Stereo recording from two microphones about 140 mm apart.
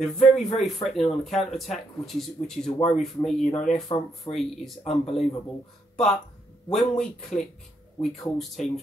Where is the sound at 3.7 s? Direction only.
50° left (ahead or behind).